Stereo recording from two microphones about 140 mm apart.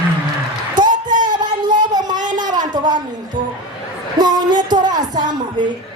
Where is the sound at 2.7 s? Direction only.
30° right (ahead or behind).